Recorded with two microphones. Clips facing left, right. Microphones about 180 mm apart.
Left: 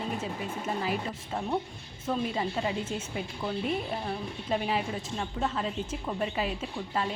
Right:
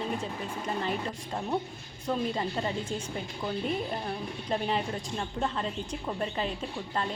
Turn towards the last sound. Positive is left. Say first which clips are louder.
# left 1 dB
turn(degrees=5)  # may be behind; listen again after turning